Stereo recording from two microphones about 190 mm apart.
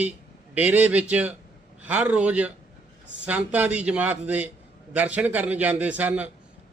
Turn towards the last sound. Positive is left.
turn(degrees=-10)  # may be behind; listen again after turning